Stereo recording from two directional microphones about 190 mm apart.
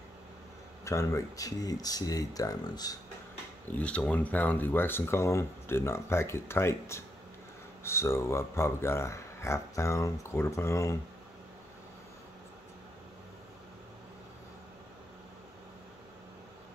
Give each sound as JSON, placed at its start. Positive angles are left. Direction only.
{"t": 0.8, "sound": "speech", "side_deg": 15}
{"t": 3.7, "sound": "speech", "side_deg": 5}